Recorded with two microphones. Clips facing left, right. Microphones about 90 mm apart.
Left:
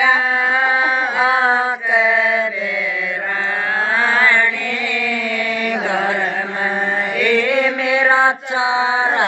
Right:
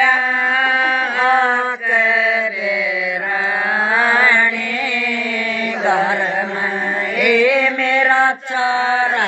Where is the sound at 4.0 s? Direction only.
15° right (ahead or behind).